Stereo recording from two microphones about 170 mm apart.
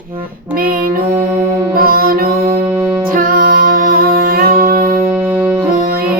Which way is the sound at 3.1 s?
55° right (ahead or behind).